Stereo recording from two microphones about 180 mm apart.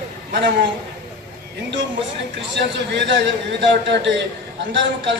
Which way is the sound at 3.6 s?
80° right.